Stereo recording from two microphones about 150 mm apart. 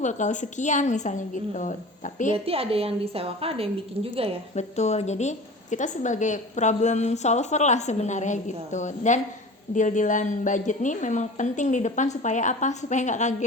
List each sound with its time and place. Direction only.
0.0 s a woman's voice: 55° left (ahead or behind)
2.3 s a woman's voice: 40° right (ahead or behind)
4.5 s a woman's voice: 50° left (ahead or behind)